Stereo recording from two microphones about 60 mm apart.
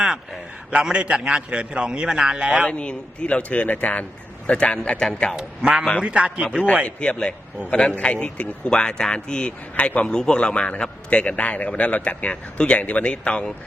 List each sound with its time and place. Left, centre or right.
0.7 s a man's voice: centre
2.6 s a man's voice: centre
5.4 s a man's voice: centre
6.8 s a man's voice: centre